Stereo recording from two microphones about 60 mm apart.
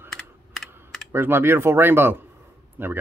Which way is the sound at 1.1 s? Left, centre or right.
Right.